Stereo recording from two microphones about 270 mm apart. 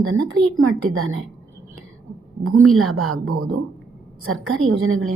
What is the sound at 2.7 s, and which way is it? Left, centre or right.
A woman's voice, right.